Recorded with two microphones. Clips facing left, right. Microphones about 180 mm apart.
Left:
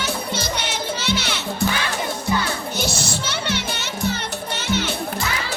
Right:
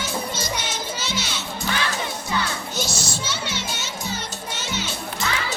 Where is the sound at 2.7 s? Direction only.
60° left (ahead or behind).